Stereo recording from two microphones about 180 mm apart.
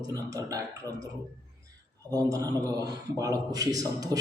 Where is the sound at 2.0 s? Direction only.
20° right (ahead or behind).